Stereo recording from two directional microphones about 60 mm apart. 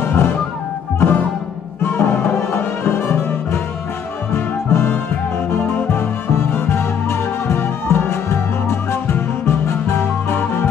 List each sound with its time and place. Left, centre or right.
0.0 s music: left
5.6 s music: left